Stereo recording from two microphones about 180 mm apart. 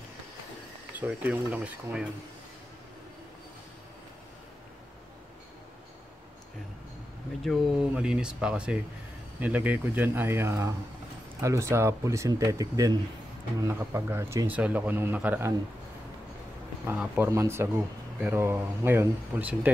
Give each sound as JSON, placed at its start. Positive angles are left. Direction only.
{"t": 0.9, "sound": "speech", "side_deg": -10}
{"t": 7.4, "sound": "speech", "side_deg": -5}
{"t": 16.8, "sound": "speech", "side_deg": -5}